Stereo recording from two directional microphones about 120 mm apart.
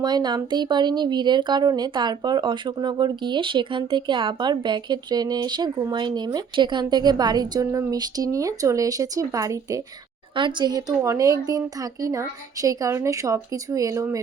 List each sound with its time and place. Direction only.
0.0 s speech: 35° right (ahead or behind)